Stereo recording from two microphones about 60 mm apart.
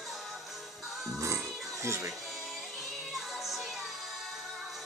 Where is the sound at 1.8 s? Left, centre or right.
Right.